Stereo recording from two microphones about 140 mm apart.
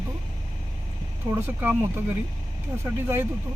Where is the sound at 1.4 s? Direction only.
15° right (ahead or behind).